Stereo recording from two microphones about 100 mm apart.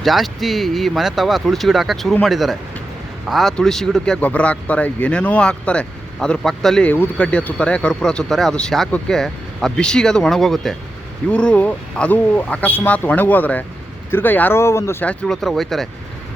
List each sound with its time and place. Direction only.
0.0 s speech: centre (ahead or behind)
6.8 s speech: 20° left (ahead or behind); by 10.8 s centre (ahead or behind)
11.3 s speech: 15° left (ahead or behind)
15.3 s speech: centre (ahead or behind)